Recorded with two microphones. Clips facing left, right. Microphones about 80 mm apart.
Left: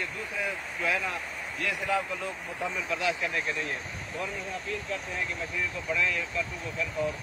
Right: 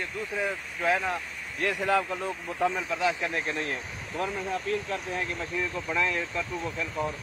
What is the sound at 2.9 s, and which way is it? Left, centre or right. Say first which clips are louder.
Speech: right 2 dB; right.